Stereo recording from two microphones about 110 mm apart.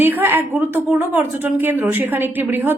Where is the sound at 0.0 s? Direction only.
20° right (ahead or behind).